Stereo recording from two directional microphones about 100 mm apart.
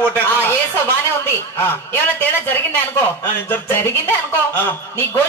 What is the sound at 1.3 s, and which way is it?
A man's voice, 25° left (ahead or behind).